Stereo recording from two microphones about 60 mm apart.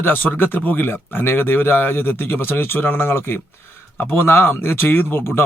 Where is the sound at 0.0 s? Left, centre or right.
Left.